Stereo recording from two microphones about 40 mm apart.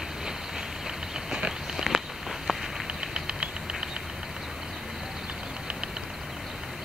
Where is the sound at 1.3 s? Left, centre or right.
Centre.